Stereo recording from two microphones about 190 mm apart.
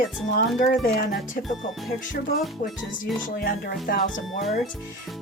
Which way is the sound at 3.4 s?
45° left (ahead or behind).